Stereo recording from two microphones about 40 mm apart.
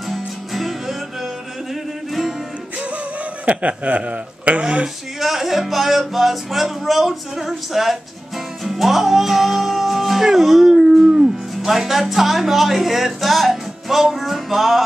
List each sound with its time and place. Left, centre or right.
0.1 s music: centre
3.4 s speech: right
5.2 s speech: centre
8.6 s music: centre
11.6 s speech: centre